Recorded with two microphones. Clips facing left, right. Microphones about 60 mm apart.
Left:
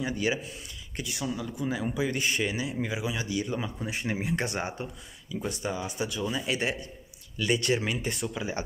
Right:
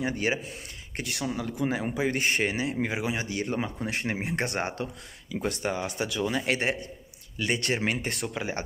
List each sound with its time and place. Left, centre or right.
0.0 s speech: right
1.9 s speech: right
5.3 s speech: right
6.2 s speech: right